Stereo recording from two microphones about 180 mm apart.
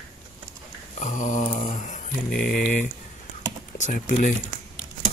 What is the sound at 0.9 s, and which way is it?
Speech, 45° left (ahead or behind).